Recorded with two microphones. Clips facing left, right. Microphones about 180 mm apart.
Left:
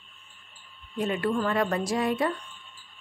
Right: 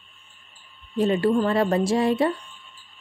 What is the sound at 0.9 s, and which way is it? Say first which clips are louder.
A woman's voice: right 7 dB; 30° right (ahead or behind).